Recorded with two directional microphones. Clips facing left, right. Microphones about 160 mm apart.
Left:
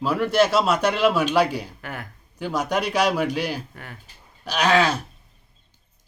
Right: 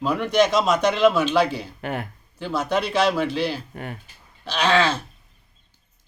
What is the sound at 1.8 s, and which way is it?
Speech, 25° right (ahead or behind).